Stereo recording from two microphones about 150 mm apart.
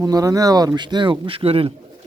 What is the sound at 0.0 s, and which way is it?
Speech, 25° right (ahead or behind).